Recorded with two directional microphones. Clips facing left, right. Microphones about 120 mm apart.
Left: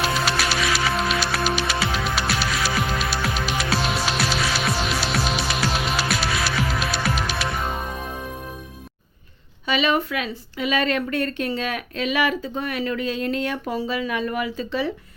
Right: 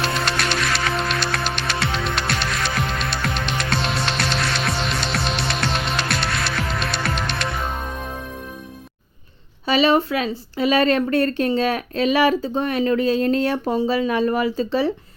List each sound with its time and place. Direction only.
0.0 s music: 5° left (ahead or behind)
9.6 s speech: 35° right (ahead or behind)